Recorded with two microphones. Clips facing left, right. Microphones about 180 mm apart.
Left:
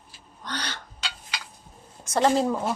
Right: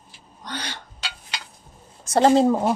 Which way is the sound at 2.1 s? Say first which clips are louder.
Right 6 dB; 30° right (ahead or behind).